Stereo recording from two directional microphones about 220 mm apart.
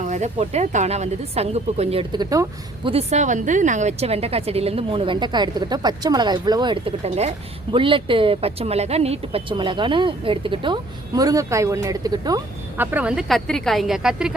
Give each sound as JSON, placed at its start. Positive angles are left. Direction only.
{"t": 0.0, "sound": "a woman's voice", "side_deg": -30}
{"t": 2.9, "sound": "a woman's voice", "side_deg": -30}